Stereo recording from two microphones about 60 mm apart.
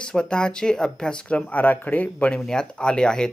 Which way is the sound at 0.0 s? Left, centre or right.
Centre.